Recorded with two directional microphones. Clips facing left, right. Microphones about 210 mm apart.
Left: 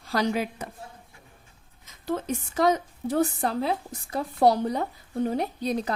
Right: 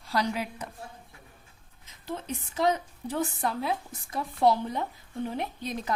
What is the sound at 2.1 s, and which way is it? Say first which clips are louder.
A woman's voice: left 7 dB; 45° left (ahead or behind).